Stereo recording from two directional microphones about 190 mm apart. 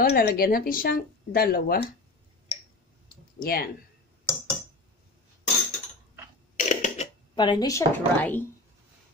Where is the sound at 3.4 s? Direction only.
50° left (ahead or behind).